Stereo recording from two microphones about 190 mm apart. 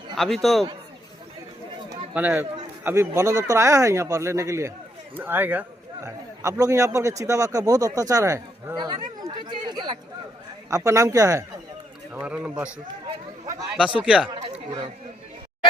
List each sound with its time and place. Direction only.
0.2 s a man's voice: centre (ahead or behind)
2.1 s a man's voice: 10° right (ahead or behind)
12.1 s a man's voice: 5° right (ahead or behind)
13.7 s a man's voice: 5° right (ahead or behind)